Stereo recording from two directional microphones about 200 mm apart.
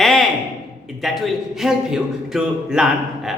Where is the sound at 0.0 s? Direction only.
Centre (ahead or behind).